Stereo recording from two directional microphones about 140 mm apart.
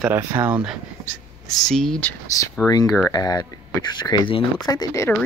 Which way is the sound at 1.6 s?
5° left (ahead or behind).